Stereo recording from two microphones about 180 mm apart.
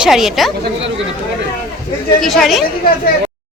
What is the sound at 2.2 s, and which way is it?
Speech, centre (ahead or behind).